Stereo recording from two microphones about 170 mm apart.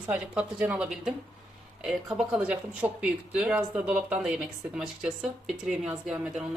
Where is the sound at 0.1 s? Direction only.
5° right (ahead or behind).